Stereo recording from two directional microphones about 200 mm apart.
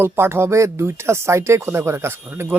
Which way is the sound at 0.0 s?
10° right (ahead or behind).